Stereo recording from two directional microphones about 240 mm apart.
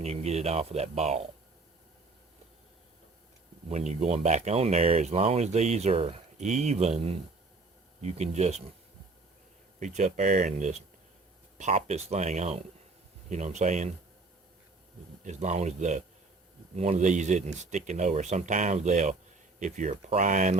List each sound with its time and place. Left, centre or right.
0.0 s speech: right
3.7 s speech: right
9.8 s speech: right
15.2 s speech: right